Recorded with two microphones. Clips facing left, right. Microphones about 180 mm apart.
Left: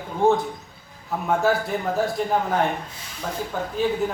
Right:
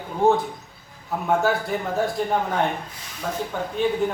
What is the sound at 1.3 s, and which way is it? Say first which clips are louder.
Speech: even; centre (ahead or behind).